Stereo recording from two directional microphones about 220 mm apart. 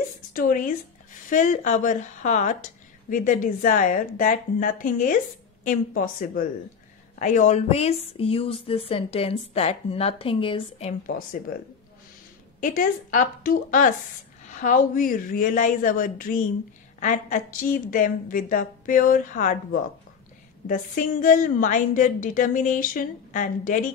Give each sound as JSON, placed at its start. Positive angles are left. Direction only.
{"t": 0.3, "sound": "a woman's voice", "side_deg": 40}
{"t": 12.5, "sound": "a woman's voice", "side_deg": 35}